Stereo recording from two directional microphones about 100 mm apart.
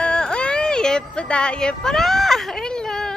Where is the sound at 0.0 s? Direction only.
10° left (ahead or behind).